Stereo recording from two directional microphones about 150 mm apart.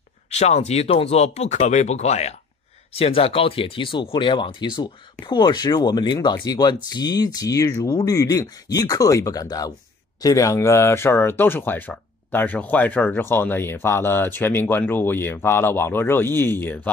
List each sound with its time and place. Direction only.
0.3 s speech: 50° left (ahead or behind); by 16.9 s 10° left (ahead or behind)